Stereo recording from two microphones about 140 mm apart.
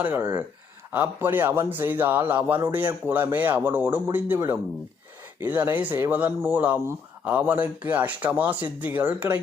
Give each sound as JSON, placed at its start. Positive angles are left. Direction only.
{"t": 0.0, "sound": "speech", "side_deg": -15}
{"t": 2.6, "sound": "a man's voice", "side_deg": -25}